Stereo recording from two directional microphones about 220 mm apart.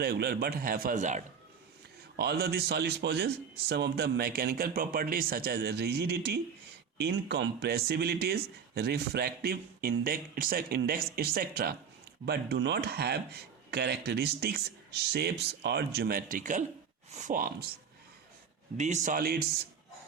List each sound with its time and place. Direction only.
0.0 s a man's voice: 45° right (ahead or behind)
2.1 s a man's voice: 45° right (ahead or behind)
18.8 s a man's voice: 30° right (ahead or behind)